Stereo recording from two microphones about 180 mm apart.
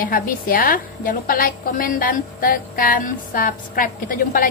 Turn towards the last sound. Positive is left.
turn(degrees=50)  # may be behind; listen again after turning